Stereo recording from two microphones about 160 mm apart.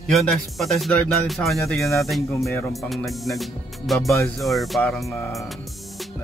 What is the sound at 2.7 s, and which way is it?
Speech, centre (ahead or behind).